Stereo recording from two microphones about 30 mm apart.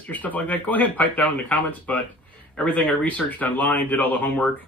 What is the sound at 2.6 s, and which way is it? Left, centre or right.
Speech, left.